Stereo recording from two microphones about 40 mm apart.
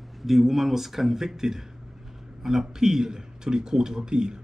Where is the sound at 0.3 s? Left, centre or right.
Centre.